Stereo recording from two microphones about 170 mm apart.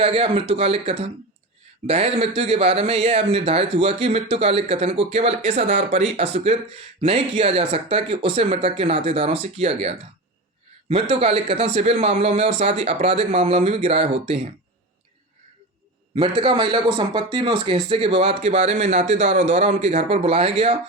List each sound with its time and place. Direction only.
0.0 s speech: 35° right (ahead or behind)
11.1 s speech: 35° right (ahead or behind)
16.1 s speech: 30° right (ahead or behind)